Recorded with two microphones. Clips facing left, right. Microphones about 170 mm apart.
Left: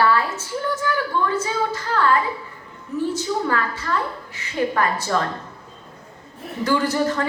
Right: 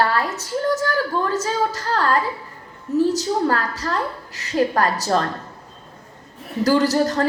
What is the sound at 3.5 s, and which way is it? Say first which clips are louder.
A woman's voice: right 1 dB; 40° right (ahead or behind).